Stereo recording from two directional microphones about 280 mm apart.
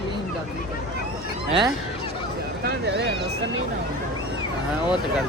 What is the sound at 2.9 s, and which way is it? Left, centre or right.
Speech, right.